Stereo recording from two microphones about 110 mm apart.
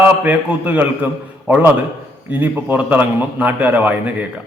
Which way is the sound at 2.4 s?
15° right (ahead or behind).